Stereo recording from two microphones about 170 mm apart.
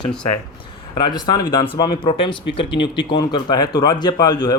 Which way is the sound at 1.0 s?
25° left (ahead or behind).